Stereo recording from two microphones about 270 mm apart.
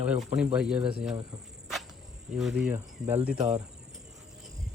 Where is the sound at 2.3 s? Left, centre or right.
Centre.